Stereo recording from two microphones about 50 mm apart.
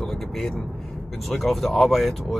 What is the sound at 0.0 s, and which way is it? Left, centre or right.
Vehicle, centre.